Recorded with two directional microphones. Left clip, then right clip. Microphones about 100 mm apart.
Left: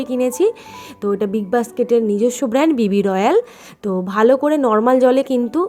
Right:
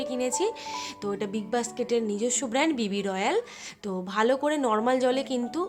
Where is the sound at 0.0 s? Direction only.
55° left (ahead or behind).